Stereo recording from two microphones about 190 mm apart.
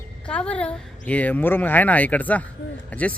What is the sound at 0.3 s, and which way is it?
Speech, 5° left (ahead or behind).